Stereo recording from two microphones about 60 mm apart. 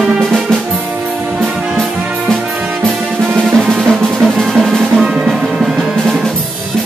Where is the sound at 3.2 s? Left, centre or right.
Centre.